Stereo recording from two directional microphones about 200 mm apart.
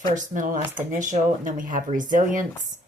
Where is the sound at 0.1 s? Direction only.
40° right (ahead or behind).